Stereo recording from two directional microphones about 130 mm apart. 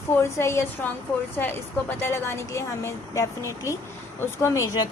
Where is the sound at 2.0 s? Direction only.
20° left (ahead or behind).